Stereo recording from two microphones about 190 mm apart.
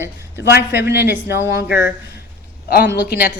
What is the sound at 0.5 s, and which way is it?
Speech, 60° left (ahead or behind).